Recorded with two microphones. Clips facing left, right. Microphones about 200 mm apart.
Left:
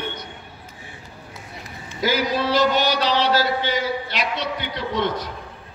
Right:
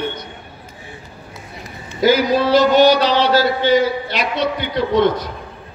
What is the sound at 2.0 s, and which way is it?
A man's voice, 45° right (ahead or behind).